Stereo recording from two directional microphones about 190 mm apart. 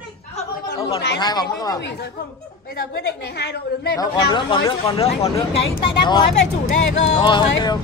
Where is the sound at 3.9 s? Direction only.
25° left (ahead or behind).